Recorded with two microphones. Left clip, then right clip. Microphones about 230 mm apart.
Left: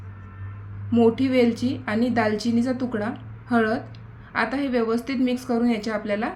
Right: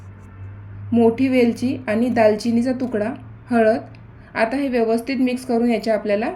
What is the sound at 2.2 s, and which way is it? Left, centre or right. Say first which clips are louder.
Speech: right 7 dB; left.